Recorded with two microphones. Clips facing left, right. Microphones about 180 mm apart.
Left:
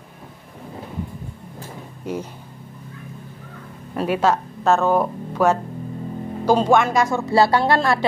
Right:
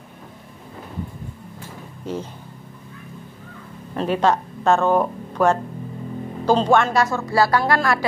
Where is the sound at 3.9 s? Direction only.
10° left (ahead or behind).